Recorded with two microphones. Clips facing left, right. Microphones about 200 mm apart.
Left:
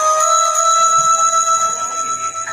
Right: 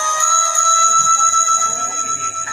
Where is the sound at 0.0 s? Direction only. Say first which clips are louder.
Left 7 dB; 60° left (ahead or behind).